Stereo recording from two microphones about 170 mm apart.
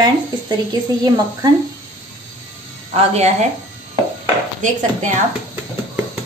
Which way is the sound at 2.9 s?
40° right (ahead or behind).